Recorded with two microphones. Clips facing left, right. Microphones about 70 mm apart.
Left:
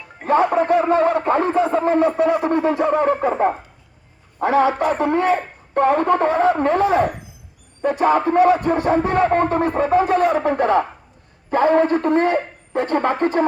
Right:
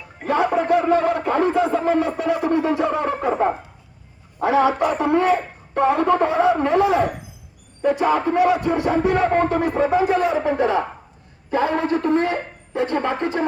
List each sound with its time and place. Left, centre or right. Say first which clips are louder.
0.3 s a man's voice: left 2 dB; left